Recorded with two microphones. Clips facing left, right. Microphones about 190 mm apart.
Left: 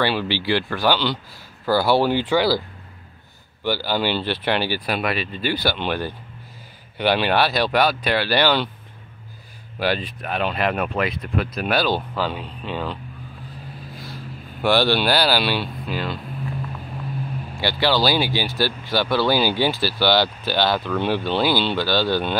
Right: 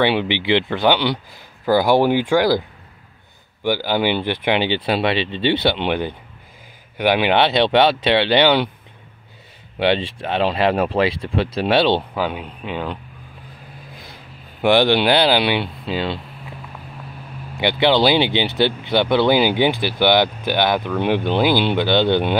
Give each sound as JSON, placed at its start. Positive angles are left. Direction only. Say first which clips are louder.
{"t": 0.0, "sound": "speech", "louder": "right 4 dB", "side_deg": -20}
{"t": 3.6, "sound": "speech", "louder": "right 3 dB", "side_deg": -15}
{"t": 9.8, "sound": "speech", "louder": "right 5 dB", "side_deg": -25}
{"t": 12.2, "sound": "speech", "louder": "right 2 dB", "side_deg": -10}
{"t": 14.6, "sound": "speech", "louder": "right 4 dB", "side_deg": -20}
{"t": 17.6, "sound": "speech", "louder": "right 5 dB", "side_deg": -20}